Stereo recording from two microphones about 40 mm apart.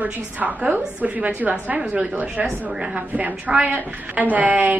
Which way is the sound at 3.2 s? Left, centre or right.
Right.